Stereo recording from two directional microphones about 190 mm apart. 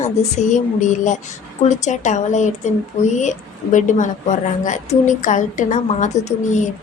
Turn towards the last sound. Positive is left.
turn(degrees=40)  # may be behind; listen again after turning